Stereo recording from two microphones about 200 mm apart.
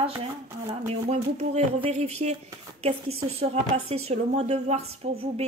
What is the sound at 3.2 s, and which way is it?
A woman's voice, 30° right (ahead or behind).